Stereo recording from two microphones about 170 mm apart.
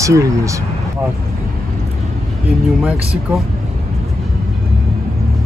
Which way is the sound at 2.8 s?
10° right (ahead or behind).